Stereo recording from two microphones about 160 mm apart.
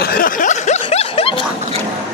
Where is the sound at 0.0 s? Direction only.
60° left (ahead or behind); by 1.3 s 40° left (ahead or behind).